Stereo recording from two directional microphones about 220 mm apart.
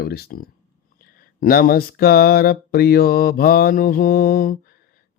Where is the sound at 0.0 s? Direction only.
45° left (ahead or behind).